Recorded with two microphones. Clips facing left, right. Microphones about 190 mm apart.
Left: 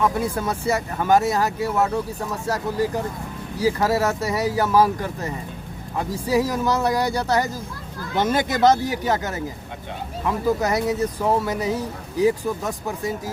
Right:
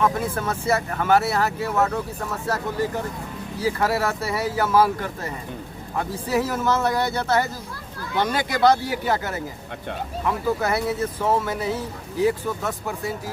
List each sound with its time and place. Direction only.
0.0 s speech: 10° left (ahead or behind)
3.8 s speech: 20° left (ahead or behind)
6.3 s speech: 15° left (ahead or behind)